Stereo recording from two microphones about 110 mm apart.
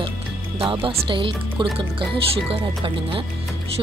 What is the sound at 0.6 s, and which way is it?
Speech, 50° right (ahead or behind).